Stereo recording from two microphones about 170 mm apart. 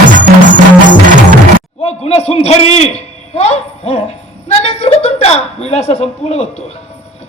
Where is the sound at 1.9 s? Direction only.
35° left (ahead or behind).